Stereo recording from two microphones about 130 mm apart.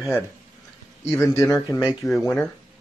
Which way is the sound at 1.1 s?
20° left (ahead or behind).